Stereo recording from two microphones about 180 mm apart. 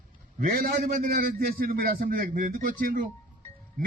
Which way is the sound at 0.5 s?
55° right (ahead or behind).